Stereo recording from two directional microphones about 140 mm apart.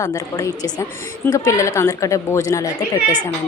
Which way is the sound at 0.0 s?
25° left (ahead or behind).